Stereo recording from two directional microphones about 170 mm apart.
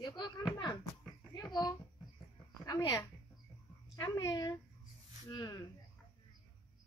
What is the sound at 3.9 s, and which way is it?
Speech, 20° left (ahead or behind).